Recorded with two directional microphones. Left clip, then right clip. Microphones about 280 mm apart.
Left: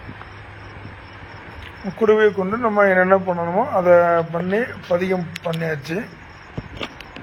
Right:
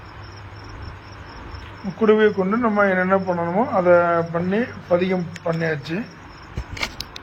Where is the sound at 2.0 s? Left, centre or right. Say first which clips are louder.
Left 1 dB; left.